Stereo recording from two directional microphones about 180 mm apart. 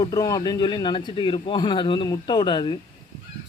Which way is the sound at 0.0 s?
20° left (ahead or behind).